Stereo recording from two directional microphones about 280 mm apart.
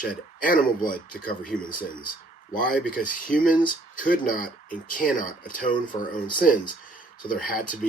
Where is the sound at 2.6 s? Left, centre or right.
Left.